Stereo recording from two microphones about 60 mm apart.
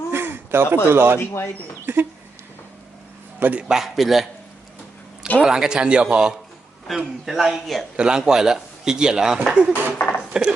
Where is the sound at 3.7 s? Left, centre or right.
Centre.